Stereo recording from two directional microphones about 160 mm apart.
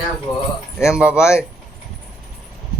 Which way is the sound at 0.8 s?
5° right (ahead or behind).